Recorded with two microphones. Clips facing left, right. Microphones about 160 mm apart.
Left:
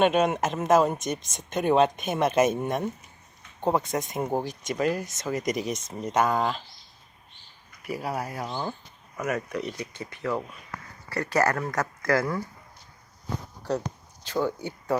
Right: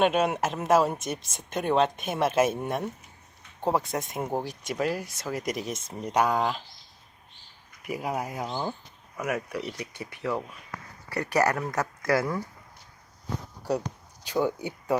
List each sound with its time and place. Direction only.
0.0 s speech: 5° right (ahead or behind)
6.1 s speech: 10° right (ahead or behind)
7.9 s speech: 15° right (ahead or behind)
13.6 s speech: 15° right (ahead or behind)